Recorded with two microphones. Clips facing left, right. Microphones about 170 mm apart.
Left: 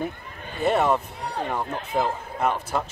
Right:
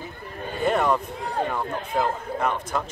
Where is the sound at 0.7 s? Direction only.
5° left (ahead or behind).